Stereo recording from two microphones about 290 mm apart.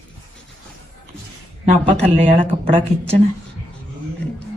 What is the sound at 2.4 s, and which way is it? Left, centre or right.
Speech, centre.